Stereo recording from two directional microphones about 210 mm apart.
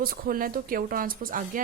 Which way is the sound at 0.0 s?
45° right (ahead or behind).